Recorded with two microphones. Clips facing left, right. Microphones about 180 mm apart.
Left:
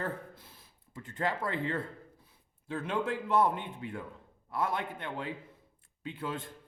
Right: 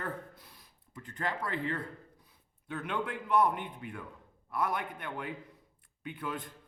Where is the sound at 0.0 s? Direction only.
25° left (ahead or behind).